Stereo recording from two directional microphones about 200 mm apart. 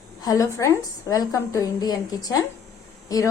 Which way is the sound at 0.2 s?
15° left (ahead or behind).